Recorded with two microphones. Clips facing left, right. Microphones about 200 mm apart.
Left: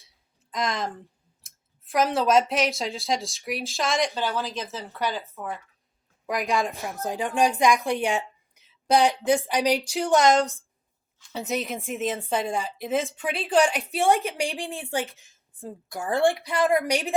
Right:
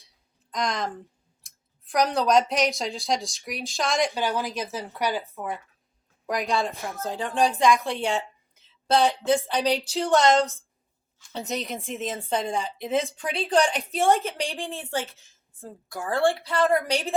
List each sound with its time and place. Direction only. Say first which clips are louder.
0.5 s speech: even; centre (ahead or behind)
4.1 s speech: right 1 dB; 15° right (ahead or behind)
6.2 s a woman's voice: even; centre (ahead or behind)
6.9 s a woman's voice: left 3 dB; 15° left (ahead or behind)
10.3 s speech: even; centre (ahead or behind)
13.9 s a woman's voice: right 2 dB; 15° left (ahead or behind)